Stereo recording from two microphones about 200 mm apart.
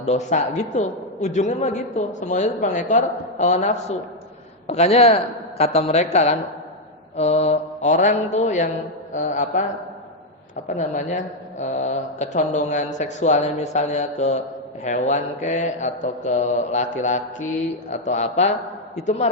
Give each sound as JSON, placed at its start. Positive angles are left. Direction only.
{"t": 0.0, "sound": "a man's voice", "side_deg": 35}
{"t": 10.7, "sound": "a man's voice", "side_deg": 40}